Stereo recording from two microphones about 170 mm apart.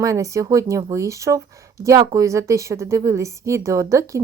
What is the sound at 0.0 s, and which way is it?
A woman's voice, 20° right (ahead or behind).